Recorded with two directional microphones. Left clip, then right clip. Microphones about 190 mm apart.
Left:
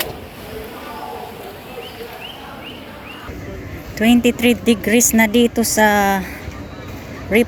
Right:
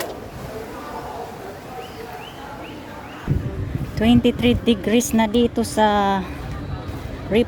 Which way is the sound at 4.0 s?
10° right (ahead or behind).